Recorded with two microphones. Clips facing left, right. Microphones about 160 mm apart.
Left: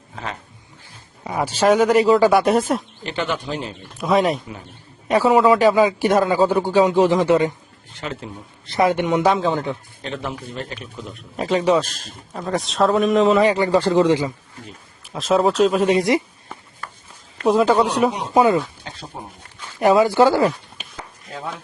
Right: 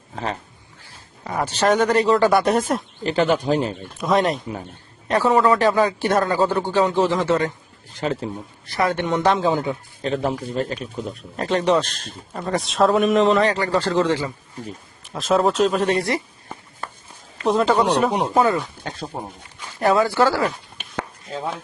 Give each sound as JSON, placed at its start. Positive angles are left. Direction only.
{"t": 0.1, "sound": "a man's voice", "side_deg": -35}
{"t": 1.2, "sound": "speech", "side_deg": 10}
{"t": 3.0, "sound": "a man's voice", "side_deg": -35}
{"t": 4.0, "sound": "a man's voice", "side_deg": 0}
{"t": 7.9, "sound": "a man's voice", "side_deg": -35}
{"t": 8.6, "sound": "speech", "side_deg": 20}
{"t": 10.0, "sound": "a man's voice", "side_deg": -35}
{"t": 11.3, "sound": "a man's voice", "side_deg": 5}
{"t": 13.4, "sound": "speech", "side_deg": 15}
{"t": 15.1, "sound": "a man's voice", "side_deg": 0}
{"t": 17.4, "sound": "speech", "side_deg": 5}
{"t": 18.8, "sound": "speech", "side_deg": -45}
{"t": 19.8, "sound": "speech", "side_deg": 15}